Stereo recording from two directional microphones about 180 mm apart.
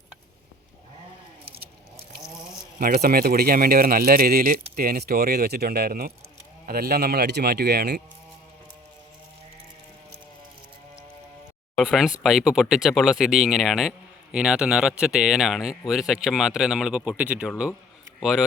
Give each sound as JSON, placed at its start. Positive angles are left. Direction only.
{"t": 2.7, "sound": "speech", "side_deg": -55}
{"t": 11.8, "sound": "speech", "side_deg": 0}